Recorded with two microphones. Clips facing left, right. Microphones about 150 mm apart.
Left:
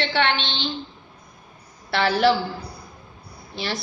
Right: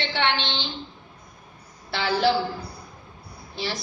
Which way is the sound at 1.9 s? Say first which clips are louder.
Left 3 dB; 70° left (ahead or behind).